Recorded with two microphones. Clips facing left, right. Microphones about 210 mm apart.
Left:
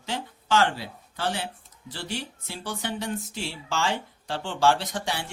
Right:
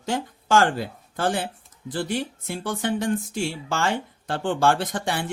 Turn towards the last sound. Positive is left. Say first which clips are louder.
# right 3 dB
turn(degrees=-55)  # may be behind; listen again after turning